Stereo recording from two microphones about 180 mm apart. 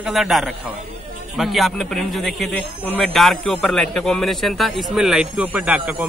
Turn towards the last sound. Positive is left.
turn(degrees=-10)  # may be behind; listen again after turning